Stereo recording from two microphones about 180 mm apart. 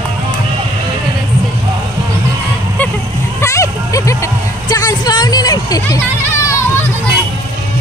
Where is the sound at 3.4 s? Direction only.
15° left (ahead or behind).